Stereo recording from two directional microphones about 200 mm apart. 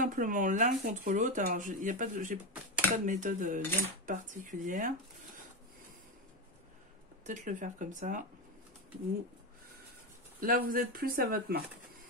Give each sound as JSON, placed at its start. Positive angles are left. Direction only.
{"t": 0.0, "sound": "speech", "side_deg": -40}
{"t": 7.2, "sound": "speech", "side_deg": -40}
{"t": 10.4, "sound": "speech", "side_deg": -45}